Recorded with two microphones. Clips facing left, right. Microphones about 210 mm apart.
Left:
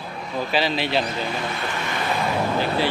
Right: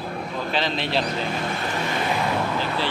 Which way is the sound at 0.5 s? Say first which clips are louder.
Left 3 dB; 5° left (ahead or behind).